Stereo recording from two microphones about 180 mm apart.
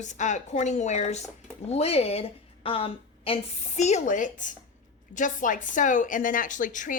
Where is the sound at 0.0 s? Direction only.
40° left (ahead or behind).